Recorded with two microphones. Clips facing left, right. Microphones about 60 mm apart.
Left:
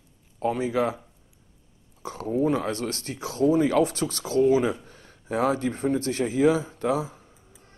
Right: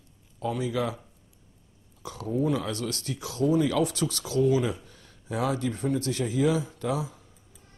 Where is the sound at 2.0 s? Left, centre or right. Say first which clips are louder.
Left 3 dB; left.